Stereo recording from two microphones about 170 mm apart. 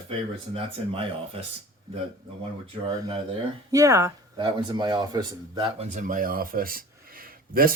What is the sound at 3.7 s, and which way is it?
Speech, 20° right (ahead or behind).